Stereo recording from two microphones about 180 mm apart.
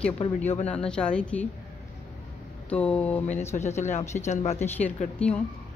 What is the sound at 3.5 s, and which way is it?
Speech, 40° left (ahead or behind).